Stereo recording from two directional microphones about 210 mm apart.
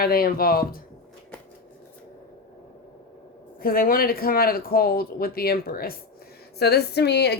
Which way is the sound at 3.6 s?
45° left (ahead or behind).